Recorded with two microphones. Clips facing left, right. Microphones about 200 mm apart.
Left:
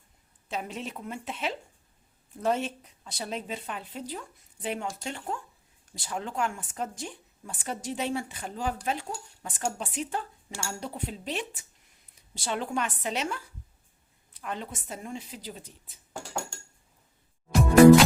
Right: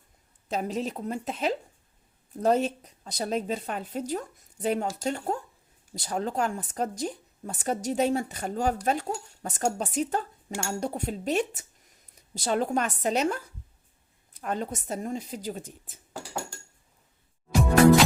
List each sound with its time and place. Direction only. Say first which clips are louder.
0.4 s speech: right 6 dB; 40° right (ahead or behind)
16.1 s dishes: even; centre (ahead or behind)